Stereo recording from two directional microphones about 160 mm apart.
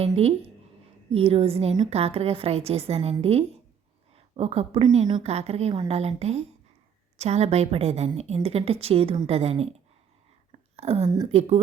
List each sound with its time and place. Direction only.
0.0 s a woman's voice: 40° right (ahead or behind)
5.2 s a woman's voice: 40° right (ahead or behind)
10.8 s a woman's voice: 40° right (ahead or behind)